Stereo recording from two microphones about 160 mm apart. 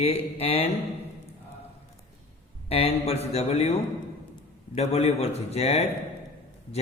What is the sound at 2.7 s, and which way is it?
Speech, 40° left (ahead or behind).